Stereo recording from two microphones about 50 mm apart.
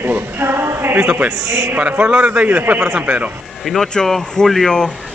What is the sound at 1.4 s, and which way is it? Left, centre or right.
Speech, right.